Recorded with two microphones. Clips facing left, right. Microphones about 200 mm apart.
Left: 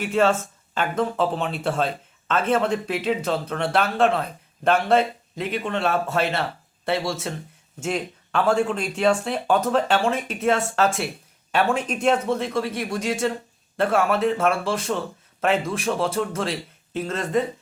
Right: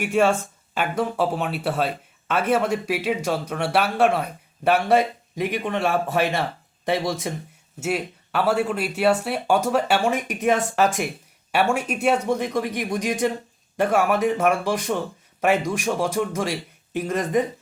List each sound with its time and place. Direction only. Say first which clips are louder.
0.0 s speech: right 1 dB; 15° right (ahead or behind)